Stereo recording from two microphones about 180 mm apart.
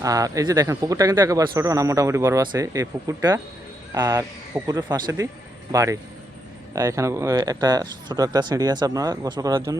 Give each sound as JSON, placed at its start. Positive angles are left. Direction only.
{"t": 0.0, "sound": "speech", "side_deg": -20}